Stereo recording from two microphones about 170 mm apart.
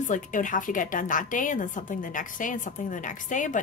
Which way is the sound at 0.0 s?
50° left (ahead or behind).